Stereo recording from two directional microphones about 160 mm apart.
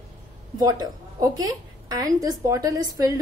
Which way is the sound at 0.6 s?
25° right (ahead or behind).